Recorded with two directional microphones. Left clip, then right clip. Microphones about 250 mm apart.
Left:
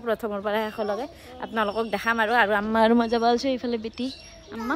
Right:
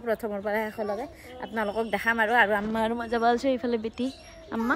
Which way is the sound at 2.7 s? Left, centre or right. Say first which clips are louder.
Left 8 dB; left.